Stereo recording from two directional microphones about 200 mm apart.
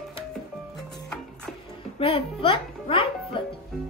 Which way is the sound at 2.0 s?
30° left (ahead or behind).